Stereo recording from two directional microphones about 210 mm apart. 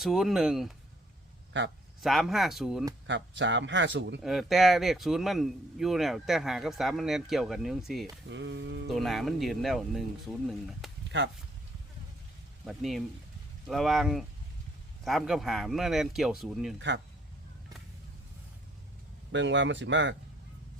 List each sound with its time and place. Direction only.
0.0 s speech: centre (ahead or behind)
2.0 s speech: centre (ahead or behind)
3.1 s speech: 60° right (ahead or behind)
4.2 s speech: centre (ahead or behind)
8.3 s speech: 60° right (ahead or behind)
8.9 s speech: centre (ahead or behind)
11.1 s speech: 60° right (ahead or behind)
12.6 s speech: centre (ahead or behind)
19.3 s speech: 60° right (ahead or behind)